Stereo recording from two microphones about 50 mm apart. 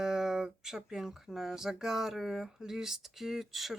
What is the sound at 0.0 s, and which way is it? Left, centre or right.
Speech, centre.